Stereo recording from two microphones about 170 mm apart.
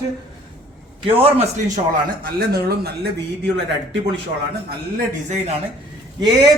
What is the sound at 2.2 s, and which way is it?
Speech, 65° right (ahead or behind).